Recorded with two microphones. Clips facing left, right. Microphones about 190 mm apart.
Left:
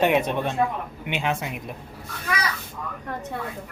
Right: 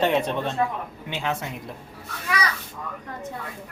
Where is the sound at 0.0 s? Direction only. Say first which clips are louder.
Left 1 dB; 15° left (ahead or behind).